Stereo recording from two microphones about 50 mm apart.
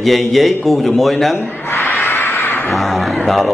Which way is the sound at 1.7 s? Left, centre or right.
Left.